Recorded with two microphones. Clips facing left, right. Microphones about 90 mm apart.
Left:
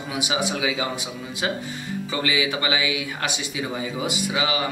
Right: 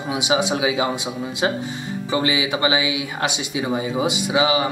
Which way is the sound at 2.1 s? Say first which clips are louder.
Right 4 dB; 20° right (ahead or behind).